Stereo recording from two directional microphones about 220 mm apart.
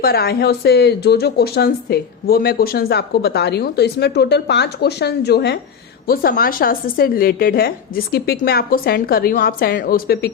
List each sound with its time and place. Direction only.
0.0 s a woman's voice: 45° left (ahead or behind)